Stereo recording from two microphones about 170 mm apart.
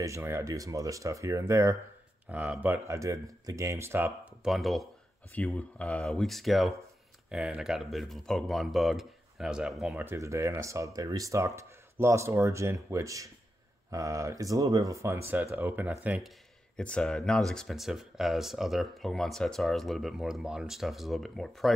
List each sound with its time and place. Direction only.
0.0 s speech: 15° right (ahead or behind)
10.0 s speech: 15° right (ahead or behind); by 21.7 s centre (ahead or behind)